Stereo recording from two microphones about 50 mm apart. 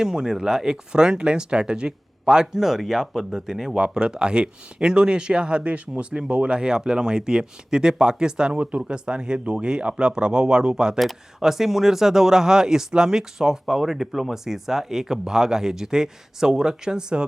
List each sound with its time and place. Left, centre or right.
0.0 s speech: centre